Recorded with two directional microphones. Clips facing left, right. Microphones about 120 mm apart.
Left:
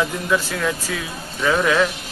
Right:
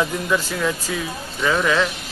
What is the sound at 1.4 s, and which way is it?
Speech, 5° left (ahead or behind).